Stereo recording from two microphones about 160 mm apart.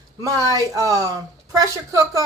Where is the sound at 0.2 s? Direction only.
20° right (ahead or behind).